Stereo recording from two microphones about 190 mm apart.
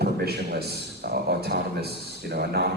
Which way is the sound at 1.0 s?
55° right (ahead or behind).